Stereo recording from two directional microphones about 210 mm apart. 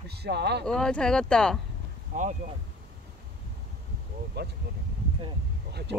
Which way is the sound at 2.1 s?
35° right (ahead or behind).